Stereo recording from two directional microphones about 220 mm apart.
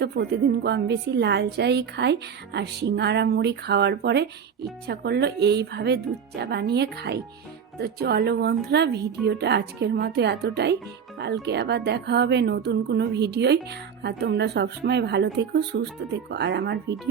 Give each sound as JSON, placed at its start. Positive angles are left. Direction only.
{"t": 0.0, "sound": "a woman's voice", "side_deg": -50}